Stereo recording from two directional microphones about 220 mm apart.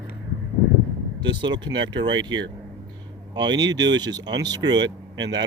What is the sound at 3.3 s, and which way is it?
Speech, 20° right (ahead or behind).